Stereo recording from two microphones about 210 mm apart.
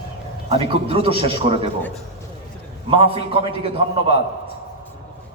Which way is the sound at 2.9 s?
25° right (ahead or behind).